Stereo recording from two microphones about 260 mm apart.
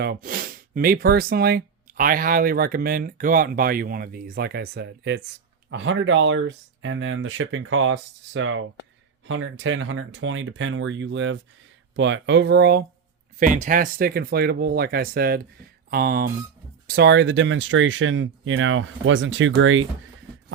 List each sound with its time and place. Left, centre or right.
0.0 s speech: right